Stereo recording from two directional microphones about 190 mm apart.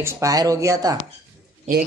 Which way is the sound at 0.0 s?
15° right (ahead or behind).